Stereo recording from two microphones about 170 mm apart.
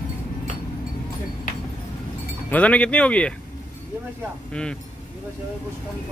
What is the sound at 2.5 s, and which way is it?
Speech, 10° left (ahead or behind).